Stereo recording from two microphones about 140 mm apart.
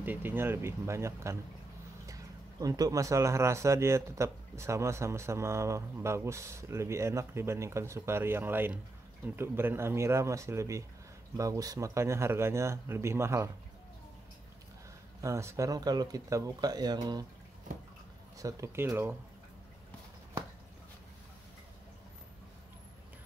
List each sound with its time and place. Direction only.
0.0 s speech: 15° right (ahead or behind)
15.2 s speech: 20° right (ahead or behind)
18.4 s speech: 25° right (ahead or behind)